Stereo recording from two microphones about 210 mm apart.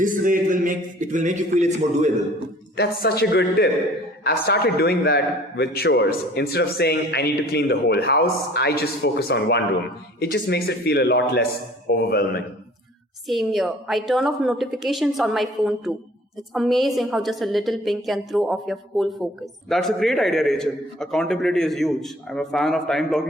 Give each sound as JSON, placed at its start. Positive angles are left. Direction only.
{"t": 0.0, "sound": "a man's voice", "side_deg": -40}
{"t": 2.7, "sound": "a man's voice", "side_deg": 50}
{"t": 13.2, "sound": "a woman's voice", "side_deg": 0}